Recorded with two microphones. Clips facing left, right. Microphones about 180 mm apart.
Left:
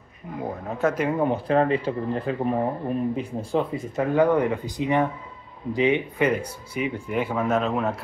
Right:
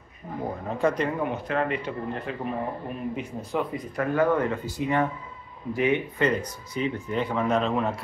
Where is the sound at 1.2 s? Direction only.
35° left (ahead or behind).